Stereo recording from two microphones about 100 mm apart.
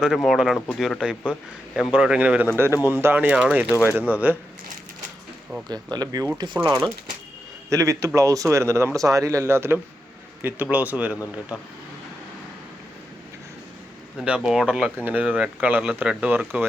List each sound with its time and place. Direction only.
0.0 s a man's voice: centre (ahead or behind); by 4.4 s 15° right (ahead or behind)
5.6 s speech: 45° right (ahead or behind)
7.7 s a man's voice: 35° right (ahead or behind); by 11.6 s 10° right (ahead or behind)
14.2 s a man's voice: 10° right (ahead or behind)